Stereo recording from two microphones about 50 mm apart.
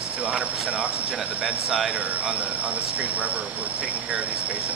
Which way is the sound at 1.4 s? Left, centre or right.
Centre.